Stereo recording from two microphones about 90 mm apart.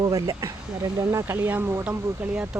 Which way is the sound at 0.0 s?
40° right (ahead or behind).